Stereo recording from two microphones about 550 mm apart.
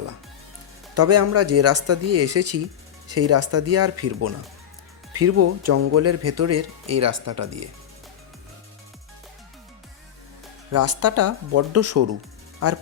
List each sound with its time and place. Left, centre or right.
0.9 s speech: right
10.7 s speech: right